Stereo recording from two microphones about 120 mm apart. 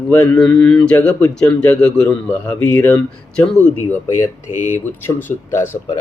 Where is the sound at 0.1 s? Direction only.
10° left (ahead or behind).